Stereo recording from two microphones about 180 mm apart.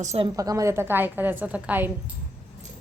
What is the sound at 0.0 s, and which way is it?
Speech, 40° right (ahead or behind).